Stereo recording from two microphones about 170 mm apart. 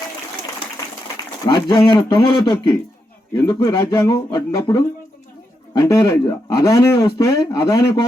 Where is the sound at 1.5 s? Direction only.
25° left (ahead or behind).